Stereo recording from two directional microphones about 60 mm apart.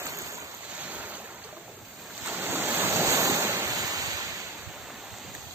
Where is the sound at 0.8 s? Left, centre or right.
Right.